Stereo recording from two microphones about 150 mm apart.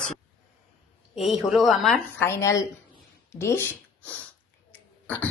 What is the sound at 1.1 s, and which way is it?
Speech, centre (ahead or behind).